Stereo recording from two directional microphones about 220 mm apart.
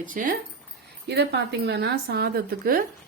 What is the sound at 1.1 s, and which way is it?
A woman's voice, 50° right (ahead or behind).